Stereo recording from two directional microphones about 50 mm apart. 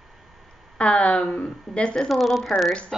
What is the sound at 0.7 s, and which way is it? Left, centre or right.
A woman's voice, left.